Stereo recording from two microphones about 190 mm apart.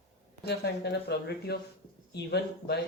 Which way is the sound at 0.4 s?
60° left (ahead or behind).